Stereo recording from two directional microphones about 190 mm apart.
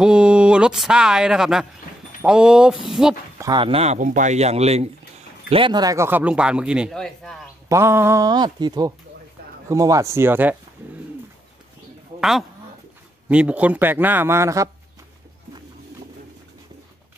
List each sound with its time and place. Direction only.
0.0 s a man's voice: 5° right (ahead or behind)
3.3 s a man's voice: 20° right (ahead or behind); by 7.3 s centre (ahead or behind)
7.6 s a man's voice: 15° right (ahead or behind)
12.2 s a man's voice: centre (ahead or behind)